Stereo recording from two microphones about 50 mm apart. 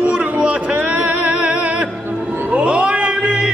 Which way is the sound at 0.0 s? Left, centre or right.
Right.